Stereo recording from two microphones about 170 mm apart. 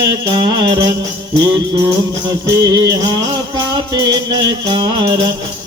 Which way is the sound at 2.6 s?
20° right (ahead or behind).